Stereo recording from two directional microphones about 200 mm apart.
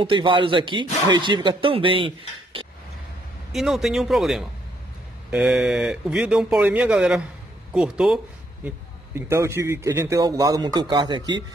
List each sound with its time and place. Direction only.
0.0 s speech: 25° right (ahead or behind)
3.5 s a man's voice: centre (ahead or behind); by 11.4 s 20° right (ahead or behind)